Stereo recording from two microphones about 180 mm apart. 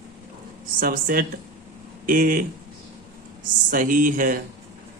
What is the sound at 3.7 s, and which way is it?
Speech, 50° right (ahead or behind).